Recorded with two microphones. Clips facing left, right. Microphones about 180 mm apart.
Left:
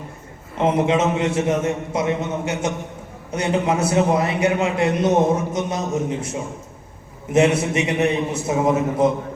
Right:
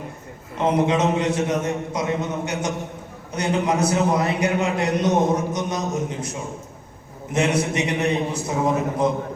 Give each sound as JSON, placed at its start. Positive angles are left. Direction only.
{"t": 0.6, "sound": "a man's voice", "side_deg": 25}
{"t": 7.3, "sound": "a man's voice", "side_deg": 25}